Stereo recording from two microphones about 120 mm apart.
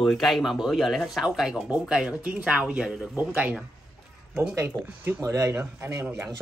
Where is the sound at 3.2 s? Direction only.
15° right (ahead or behind).